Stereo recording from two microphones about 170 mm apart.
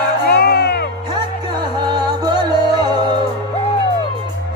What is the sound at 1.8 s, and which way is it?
Music, 25° right (ahead or behind).